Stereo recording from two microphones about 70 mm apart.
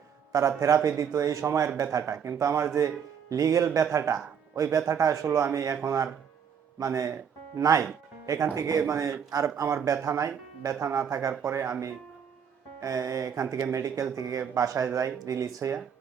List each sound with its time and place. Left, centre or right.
0.3 s speech: right